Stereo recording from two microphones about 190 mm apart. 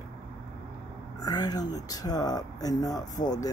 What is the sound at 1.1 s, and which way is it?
Speech, 20° left (ahead or behind).